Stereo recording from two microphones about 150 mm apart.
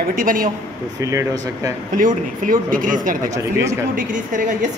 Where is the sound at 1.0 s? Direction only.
20° right (ahead or behind).